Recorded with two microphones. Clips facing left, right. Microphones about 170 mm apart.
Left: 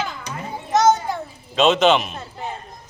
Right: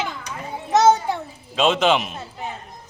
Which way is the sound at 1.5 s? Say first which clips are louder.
Left 3 dB; centre (ahead or behind).